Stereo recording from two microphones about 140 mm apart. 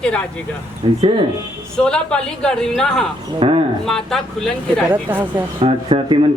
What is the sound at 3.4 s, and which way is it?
Speech, 40° right (ahead or behind).